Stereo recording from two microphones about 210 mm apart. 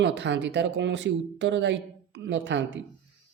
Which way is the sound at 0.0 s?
55° right (ahead or behind).